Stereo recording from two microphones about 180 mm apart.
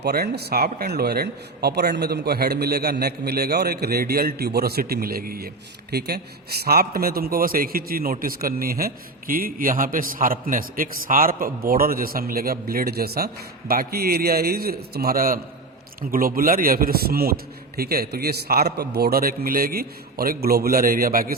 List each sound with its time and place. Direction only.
0.0 s a man's voice: 65° right (ahead or behind)